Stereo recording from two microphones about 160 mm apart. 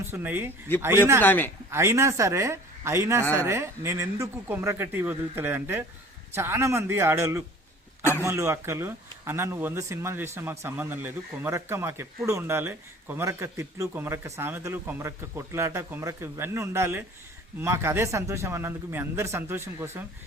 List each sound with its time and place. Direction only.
0.0 s speech: 15° right (ahead or behind)
1.2 s speech: 10° left (ahead or behind)
1.7 s speech: 15° right (ahead or behind)